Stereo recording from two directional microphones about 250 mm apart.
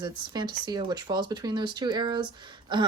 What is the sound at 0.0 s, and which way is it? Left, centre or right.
Speech, centre.